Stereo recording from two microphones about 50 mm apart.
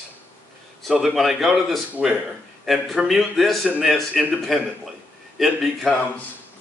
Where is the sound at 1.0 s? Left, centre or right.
Centre.